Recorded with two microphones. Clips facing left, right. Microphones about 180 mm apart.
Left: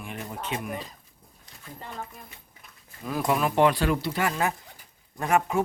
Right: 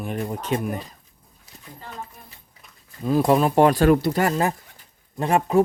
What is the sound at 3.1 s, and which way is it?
Speech, 30° right (ahead or behind).